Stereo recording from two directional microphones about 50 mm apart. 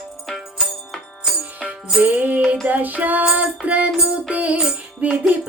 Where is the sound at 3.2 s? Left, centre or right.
Right.